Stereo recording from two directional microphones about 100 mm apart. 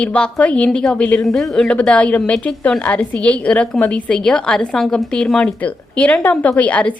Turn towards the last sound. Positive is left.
turn(degrees=15)  # may be behind; listen again after turning